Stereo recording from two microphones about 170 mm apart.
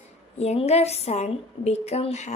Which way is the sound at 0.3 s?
40° left (ahead or behind).